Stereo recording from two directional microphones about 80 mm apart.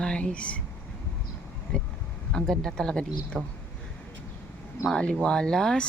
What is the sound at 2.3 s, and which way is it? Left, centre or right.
Speech, centre.